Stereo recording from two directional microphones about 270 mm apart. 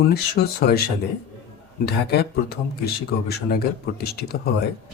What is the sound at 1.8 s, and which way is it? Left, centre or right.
Speech, left.